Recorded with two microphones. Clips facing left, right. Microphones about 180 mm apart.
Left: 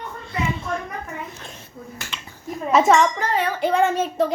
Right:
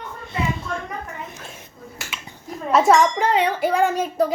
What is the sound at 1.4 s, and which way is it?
Hands, 5° right (ahead or behind).